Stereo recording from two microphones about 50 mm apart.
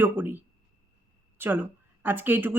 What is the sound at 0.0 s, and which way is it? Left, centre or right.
Speech, right.